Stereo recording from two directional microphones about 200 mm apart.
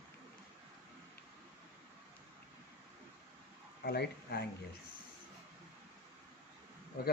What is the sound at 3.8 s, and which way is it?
Speech, 50° left (ahead or behind).